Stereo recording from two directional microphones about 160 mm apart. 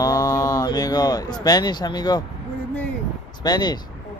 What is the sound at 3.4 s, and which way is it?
Speech, 25° left (ahead or behind).